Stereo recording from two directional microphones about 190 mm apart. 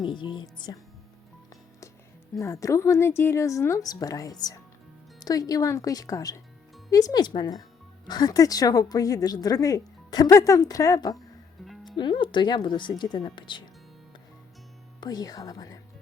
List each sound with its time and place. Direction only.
0.0 s a woman's voice: 25° left (ahead or behind)
2.4 s a woman's voice: 15° left (ahead or behind)
11.6 s music: centre (ahead or behind)
11.9 s a woman's voice: 25° left (ahead or behind)
15.0 s a woman's voice: 20° left (ahead or behind)